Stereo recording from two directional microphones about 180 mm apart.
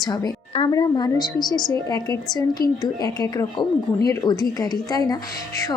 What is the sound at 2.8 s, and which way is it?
A woman's voice, 20° left (ahead or behind).